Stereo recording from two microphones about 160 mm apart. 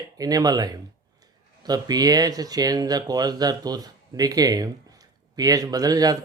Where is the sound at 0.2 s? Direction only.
25° right (ahead or behind).